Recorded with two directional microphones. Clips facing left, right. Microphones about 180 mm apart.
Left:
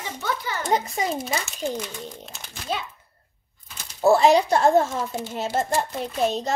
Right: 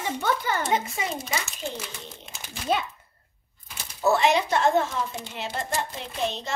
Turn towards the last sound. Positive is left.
turn(degrees=40)  # may be behind; listen again after turning